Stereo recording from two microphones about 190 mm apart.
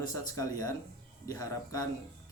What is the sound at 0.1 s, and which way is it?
A man's voice, 20° left (ahead or behind).